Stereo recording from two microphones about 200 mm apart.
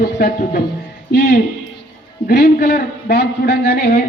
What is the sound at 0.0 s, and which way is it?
A man's voice, 45° left (ahead or behind).